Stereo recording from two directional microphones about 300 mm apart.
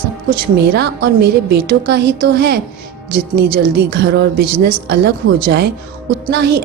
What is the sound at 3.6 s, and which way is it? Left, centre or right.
A woman's voice, right.